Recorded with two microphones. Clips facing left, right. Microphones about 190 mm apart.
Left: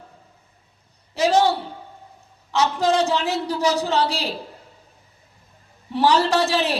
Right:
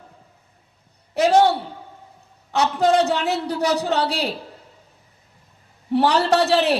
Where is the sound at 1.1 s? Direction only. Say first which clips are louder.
Right 2 dB; 60° right (ahead or behind).